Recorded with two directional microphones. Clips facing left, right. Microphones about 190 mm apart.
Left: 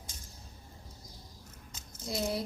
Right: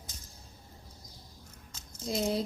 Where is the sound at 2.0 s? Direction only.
20° right (ahead or behind).